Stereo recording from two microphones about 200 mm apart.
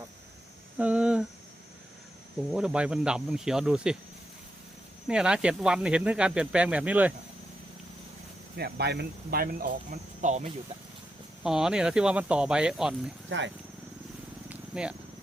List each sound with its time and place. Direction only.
0.8 s speech: 5° right (ahead or behind)
2.5 s speech: 5° right (ahead or behind)
5.0 s speech: 5° right (ahead or behind)
8.5 s speech: 55° right (ahead or behind); by 10.5 s 40° right (ahead or behind)
11.4 s speech: 5° right (ahead or behind)
13.3 s speech: 65° right (ahead or behind)
14.5 s a sound: 5° right (ahead or behind)